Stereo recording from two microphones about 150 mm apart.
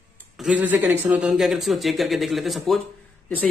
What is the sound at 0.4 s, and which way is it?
Speech, 10° right (ahead or behind).